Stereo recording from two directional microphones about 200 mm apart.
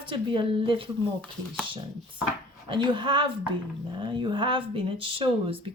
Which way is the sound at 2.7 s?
25° right (ahead or behind).